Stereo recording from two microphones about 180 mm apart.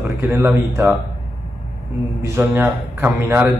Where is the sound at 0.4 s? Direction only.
15° right (ahead or behind).